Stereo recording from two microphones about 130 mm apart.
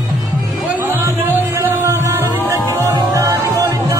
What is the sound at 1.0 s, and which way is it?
Music, 20° right (ahead or behind).